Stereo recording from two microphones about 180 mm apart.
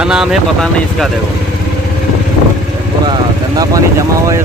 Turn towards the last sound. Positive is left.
turn(degrees=-20)  # may be behind; listen again after turning